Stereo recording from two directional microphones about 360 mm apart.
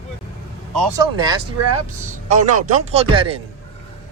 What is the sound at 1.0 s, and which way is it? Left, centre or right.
Speech, centre.